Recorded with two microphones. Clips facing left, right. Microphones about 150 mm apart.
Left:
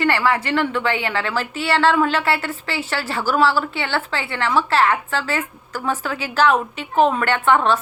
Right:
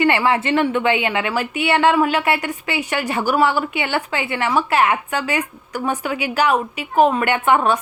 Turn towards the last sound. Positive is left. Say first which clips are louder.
# right 1 dB
turn(degrees=-15)  # may be behind; listen again after turning